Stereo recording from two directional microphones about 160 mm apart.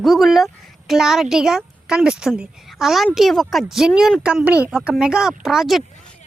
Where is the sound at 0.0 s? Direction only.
Centre (ahead or behind).